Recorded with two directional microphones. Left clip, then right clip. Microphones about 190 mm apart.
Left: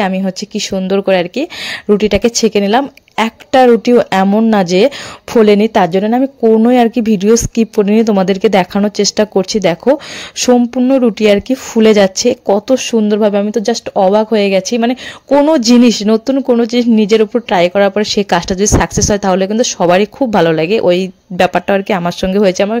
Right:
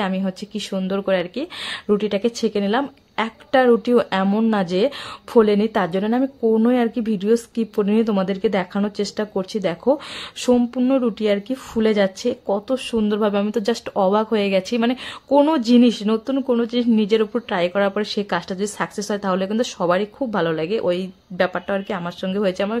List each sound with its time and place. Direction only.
0.0 s speech: 30° left (ahead or behind)